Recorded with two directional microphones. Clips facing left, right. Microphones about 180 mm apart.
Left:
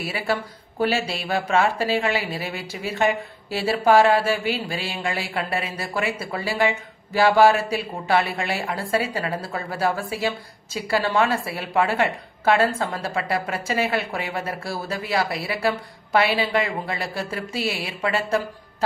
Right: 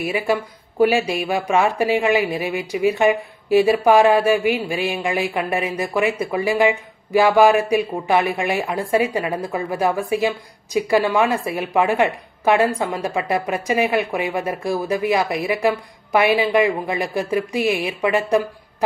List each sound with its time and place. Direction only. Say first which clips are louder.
0.0 s speech: right 5 dB; 15° right (ahead or behind)